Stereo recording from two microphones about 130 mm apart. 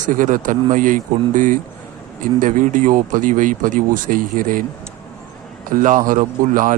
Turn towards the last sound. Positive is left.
turn(degrees=-90)